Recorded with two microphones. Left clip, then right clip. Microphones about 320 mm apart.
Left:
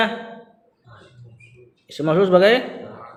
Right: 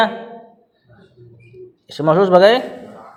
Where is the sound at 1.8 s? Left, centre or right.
Centre.